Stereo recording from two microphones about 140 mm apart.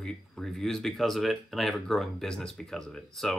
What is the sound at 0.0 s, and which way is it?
Speech, 5° left (ahead or behind).